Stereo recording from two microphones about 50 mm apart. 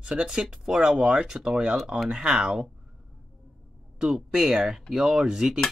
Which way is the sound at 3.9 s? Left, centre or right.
Centre.